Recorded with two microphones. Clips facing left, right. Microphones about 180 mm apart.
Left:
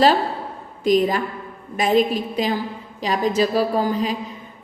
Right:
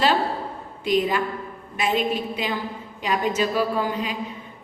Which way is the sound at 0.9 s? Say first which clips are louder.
Left 4 dB; 40° left (ahead or behind).